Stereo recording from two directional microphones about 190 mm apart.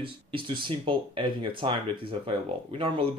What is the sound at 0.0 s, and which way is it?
Speech, 25° right (ahead or behind).